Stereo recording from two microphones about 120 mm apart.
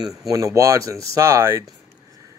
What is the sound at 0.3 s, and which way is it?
Speech, 25° right (ahead or behind).